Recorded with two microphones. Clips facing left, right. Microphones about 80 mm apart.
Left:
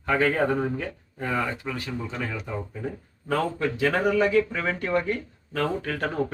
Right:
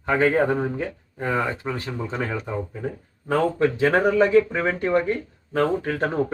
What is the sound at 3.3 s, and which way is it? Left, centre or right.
Speech, right.